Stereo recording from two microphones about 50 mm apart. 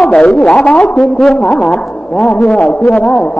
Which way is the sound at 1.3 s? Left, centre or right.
Left.